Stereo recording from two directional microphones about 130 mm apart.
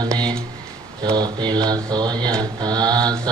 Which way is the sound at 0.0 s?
30° right (ahead or behind).